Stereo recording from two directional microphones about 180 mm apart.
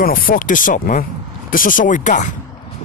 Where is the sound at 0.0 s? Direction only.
50° left (ahead or behind).